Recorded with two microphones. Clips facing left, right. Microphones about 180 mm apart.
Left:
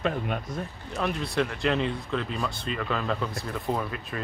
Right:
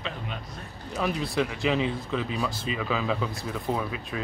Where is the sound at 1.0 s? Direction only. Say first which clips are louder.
Even; centre (ahead or behind).